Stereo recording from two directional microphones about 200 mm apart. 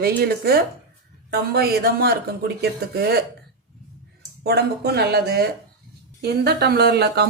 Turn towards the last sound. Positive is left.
turn(degrees=-55)  # may be behind; listen again after turning